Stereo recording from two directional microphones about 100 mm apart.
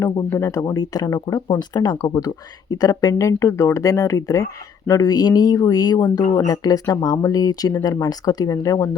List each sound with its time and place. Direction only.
0.0 s speech: 30° left (ahead or behind)